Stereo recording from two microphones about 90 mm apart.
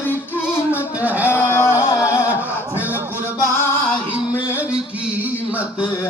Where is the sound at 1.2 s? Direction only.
25° left (ahead or behind).